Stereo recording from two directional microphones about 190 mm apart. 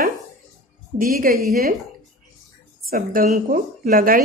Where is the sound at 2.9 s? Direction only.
50° right (ahead or behind).